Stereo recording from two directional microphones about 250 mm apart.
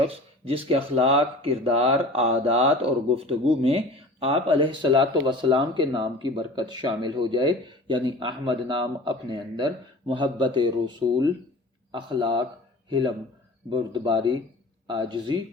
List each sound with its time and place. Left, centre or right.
0.0 s speech: right